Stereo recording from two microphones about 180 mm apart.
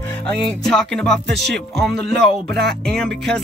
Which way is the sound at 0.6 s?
5° left (ahead or behind).